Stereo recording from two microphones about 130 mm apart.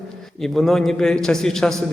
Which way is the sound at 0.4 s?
Centre (ahead or behind).